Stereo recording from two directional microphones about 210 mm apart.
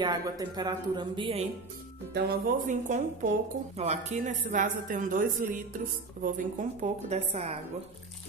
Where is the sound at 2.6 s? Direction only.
35° right (ahead or behind).